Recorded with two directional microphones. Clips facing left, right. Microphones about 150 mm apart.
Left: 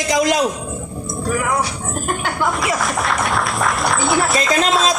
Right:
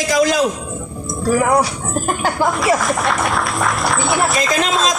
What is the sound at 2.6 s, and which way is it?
Speech, centre (ahead or behind).